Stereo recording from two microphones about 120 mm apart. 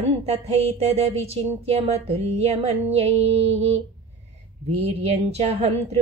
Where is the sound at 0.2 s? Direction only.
60° right (ahead or behind).